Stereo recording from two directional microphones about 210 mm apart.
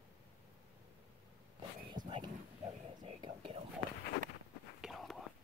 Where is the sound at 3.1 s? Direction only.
25° right (ahead or behind).